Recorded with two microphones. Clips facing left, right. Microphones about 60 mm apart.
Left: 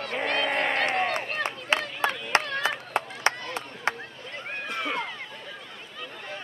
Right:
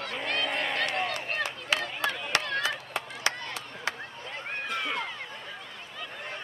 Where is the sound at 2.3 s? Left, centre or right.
Left.